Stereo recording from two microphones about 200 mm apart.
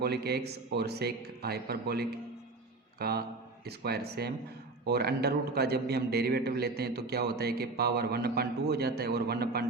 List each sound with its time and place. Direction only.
0.0 s a man's voice: 55° right (ahead or behind)